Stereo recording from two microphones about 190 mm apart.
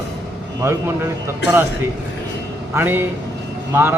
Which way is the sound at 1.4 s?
65° left (ahead or behind).